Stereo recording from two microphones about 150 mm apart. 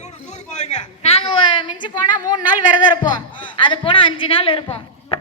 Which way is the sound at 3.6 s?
35° left (ahead or behind).